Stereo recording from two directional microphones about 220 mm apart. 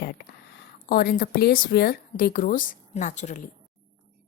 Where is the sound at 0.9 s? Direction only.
45° left (ahead or behind).